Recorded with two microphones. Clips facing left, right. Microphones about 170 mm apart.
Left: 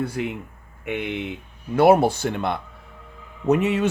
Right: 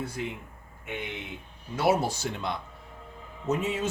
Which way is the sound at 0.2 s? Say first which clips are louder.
Left 7 dB; 70° left (ahead or behind).